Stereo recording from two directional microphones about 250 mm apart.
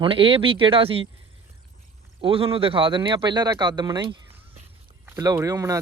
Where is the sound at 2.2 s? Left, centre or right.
Right.